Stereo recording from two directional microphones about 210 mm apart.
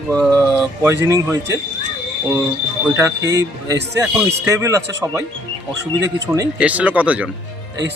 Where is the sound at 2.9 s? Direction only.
15° right (ahead or behind).